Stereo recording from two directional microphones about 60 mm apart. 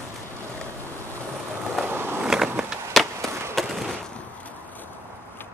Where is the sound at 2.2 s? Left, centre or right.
Centre.